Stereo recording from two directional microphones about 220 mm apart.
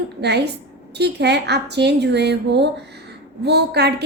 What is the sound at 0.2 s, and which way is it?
A woman's voice, 50° right (ahead or behind).